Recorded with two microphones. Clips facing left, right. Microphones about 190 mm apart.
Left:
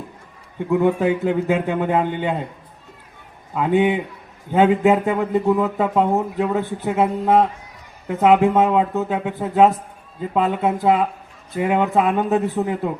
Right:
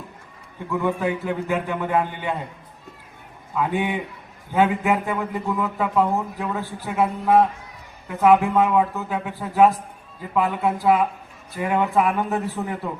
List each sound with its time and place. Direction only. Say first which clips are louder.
0.7 s a man's voice: left 6 dB; 20° left (ahead or behind)
3.5 s a man's voice: left 6 dB; 20° left (ahead or behind)